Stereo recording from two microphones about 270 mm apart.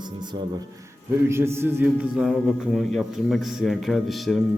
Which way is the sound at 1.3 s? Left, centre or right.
Centre.